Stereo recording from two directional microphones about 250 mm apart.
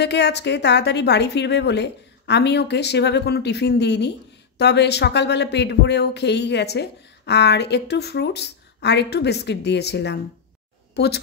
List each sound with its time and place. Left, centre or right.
0.0 s a woman's voice: left